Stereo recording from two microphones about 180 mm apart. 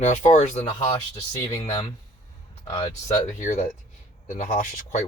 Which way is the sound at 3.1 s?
45° left (ahead or behind).